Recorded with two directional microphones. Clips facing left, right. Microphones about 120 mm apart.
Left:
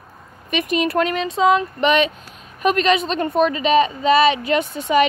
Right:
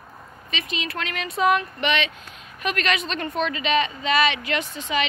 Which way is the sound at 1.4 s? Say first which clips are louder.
Left 4 dB; 20° left (ahead or behind).